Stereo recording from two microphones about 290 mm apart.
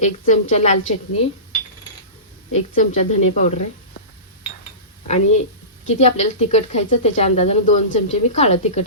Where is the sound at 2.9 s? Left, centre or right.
Left.